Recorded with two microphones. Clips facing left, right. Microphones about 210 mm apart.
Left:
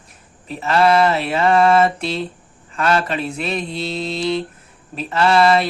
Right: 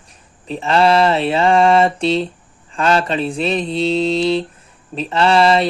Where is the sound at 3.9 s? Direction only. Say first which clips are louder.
Right 10 dB; 85° right.